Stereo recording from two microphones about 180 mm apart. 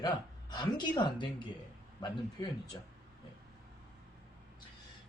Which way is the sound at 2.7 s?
20° left (ahead or behind).